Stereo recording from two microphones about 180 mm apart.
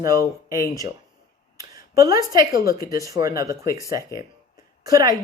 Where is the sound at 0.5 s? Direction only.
20° right (ahead or behind).